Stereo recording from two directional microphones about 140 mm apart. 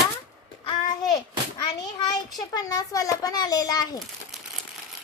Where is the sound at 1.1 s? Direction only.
30° left (ahead or behind).